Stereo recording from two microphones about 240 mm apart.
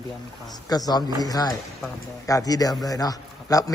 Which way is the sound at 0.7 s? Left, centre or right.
Centre.